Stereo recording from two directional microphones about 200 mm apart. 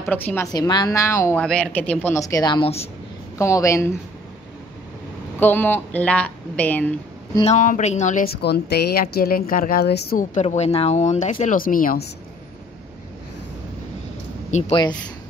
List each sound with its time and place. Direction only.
0.1 s a woman's voice: 10° left (ahead or behind); by 2.9 s 30° left (ahead or behind)
3.3 s a woman's voice: 15° left (ahead or behind)
5.4 s a woman's voice: 10° left (ahead or behind)
7.3 s speech: 35° left (ahead or behind); by 10.2 s 55° left (ahead or behind)
10.3 s speech: 35° left (ahead or behind)
14.5 s speech: 25° left (ahead or behind)